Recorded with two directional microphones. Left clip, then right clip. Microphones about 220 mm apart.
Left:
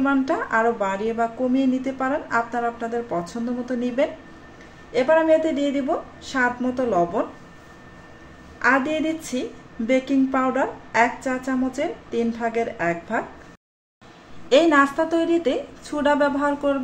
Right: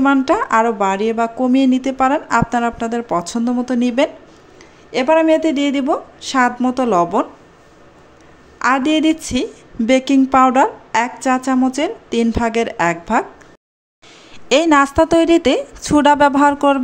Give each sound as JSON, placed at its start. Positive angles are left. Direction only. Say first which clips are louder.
{"t": 0.0, "sound": "speech", "louder": "right 7 dB", "side_deg": -40}
{"t": 8.5, "sound": "a woman's voice", "louder": "right 5 dB", "side_deg": -45}
{"t": 14.5, "sound": "a woman's voice", "louder": "right 4 dB", "side_deg": -50}